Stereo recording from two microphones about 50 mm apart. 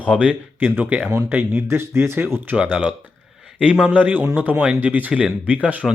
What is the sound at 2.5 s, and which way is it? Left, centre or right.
Speech, right.